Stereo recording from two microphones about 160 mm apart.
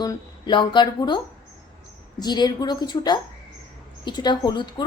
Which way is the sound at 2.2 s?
25° left (ahead or behind).